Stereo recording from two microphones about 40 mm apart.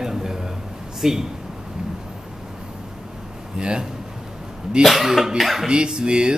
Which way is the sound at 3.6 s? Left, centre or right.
Right.